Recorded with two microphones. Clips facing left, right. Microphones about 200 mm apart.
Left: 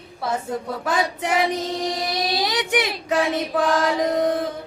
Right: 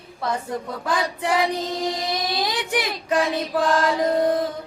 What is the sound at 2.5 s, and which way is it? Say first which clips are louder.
Speech: left 2 dB; 20° left (ahead or behind).